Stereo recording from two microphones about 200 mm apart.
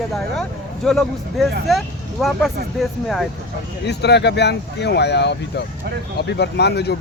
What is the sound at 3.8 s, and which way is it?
Speech, 55° left (ahead or behind).